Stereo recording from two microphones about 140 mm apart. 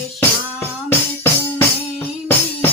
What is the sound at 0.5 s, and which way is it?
Music, 15° left (ahead or behind).